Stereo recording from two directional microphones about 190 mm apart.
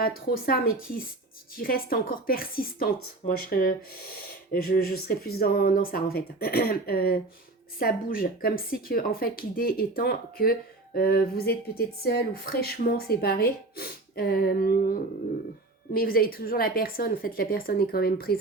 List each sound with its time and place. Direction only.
0.0 s speech: 55° left (ahead or behind)